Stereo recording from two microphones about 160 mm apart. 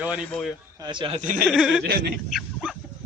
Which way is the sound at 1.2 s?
55° right (ahead or behind).